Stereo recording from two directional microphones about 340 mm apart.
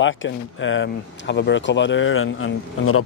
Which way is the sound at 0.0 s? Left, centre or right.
Left.